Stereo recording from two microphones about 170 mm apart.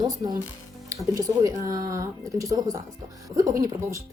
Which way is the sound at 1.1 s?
20° right (ahead or behind).